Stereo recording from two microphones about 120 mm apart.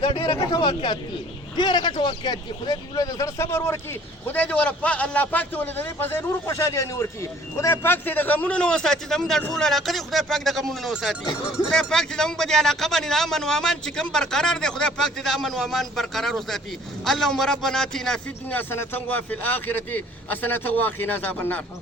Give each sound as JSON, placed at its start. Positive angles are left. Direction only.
{"t": 0.0, "sound": "a man's voice", "side_deg": 45}
{"t": 18.5, "sound": "a man's voice", "side_deg": 15}